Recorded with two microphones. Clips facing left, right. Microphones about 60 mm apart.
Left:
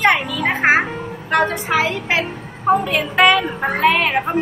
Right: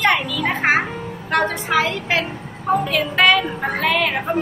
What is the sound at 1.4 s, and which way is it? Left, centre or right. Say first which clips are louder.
Speech: left 1 dB; centre.